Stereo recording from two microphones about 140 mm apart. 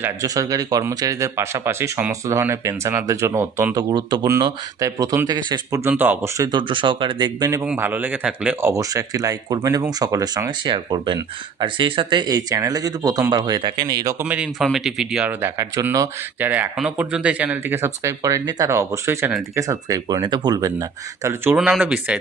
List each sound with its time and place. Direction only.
0.0 s speech: 25° right (ahead or behind)
3.8 s speech: 30° right (ahead or behind)
5.9 s speech: 15° right (ahead or behind)
6.5 s speech: 35° right (ahead or behind)
7.6 s speech: 10° right (ahead or behind)
8.7 s speech: 25° right (ahead or behind)
14.3 s speech: 5° right (ahead or behind)
16.7 s speech: 5° right (ahead or behind); by 20.8 s 25° right (ahead or behind)
21.2 s speech: 15° right (ahead or behind)